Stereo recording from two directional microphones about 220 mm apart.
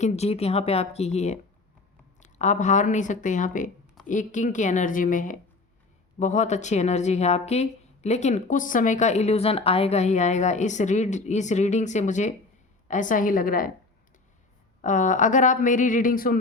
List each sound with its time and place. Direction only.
0.0 s speech: 30° left (ahead or behind)
14.8 s speech: 35° left (ahead or behind)